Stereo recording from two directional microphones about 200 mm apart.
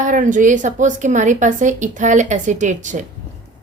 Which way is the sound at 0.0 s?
40° right (ahead or behind).